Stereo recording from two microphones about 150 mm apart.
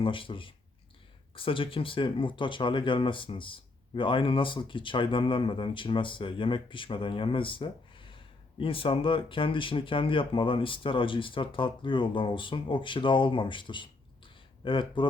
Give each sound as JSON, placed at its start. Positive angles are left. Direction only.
{"t": 0.0, "sound": "speech", "side_deg": 35}